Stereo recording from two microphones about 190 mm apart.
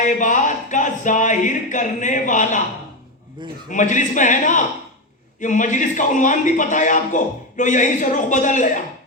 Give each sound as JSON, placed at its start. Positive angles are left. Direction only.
{"t": 0.0, "sound": "a man's voice", "side_deg": 40}
{"t": 3.7, "sound": "a man's voice", "side_deg": 40}